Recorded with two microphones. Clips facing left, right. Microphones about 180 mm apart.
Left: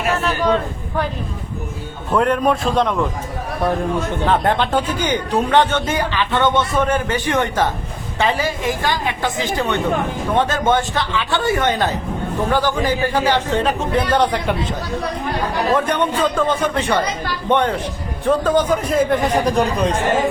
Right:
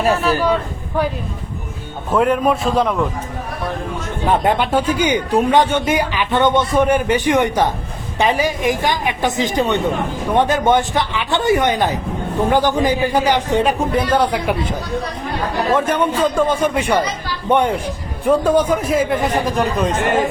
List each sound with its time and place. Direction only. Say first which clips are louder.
0.2 s speech: right 2 dB; centre (ahead or behind)
2.1 s speech: right 1 dB; 5° right (ahead or behind)
4.3 s speech: right 2 dB; 10° right (ahead or behind)
15.7 s speech: right 2 dB; 5° right (ahead or behind)